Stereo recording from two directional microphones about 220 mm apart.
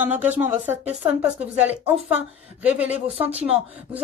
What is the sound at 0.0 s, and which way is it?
A woman's voice, 10° right (ahead or behind).